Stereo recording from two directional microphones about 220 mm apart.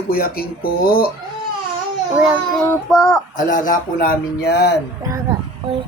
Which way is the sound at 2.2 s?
Centre (ahead or behind).